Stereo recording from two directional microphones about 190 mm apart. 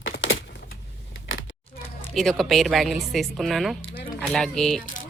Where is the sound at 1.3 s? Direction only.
75° left (ahead or behind).